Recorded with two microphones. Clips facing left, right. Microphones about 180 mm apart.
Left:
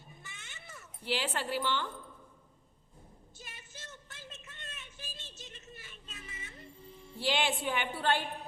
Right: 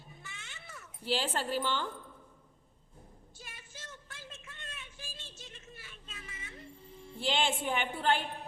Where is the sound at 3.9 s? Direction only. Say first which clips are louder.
Right 1 dB; 5° left (ahead or behind).